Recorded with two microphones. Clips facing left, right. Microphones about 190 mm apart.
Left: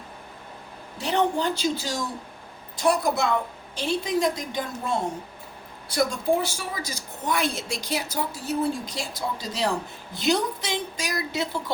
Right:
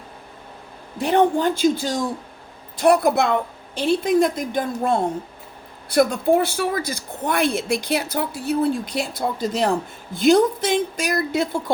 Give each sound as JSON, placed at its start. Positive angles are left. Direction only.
{"t": 0.9, "sound": "a woman's voice", "side_deg": -50}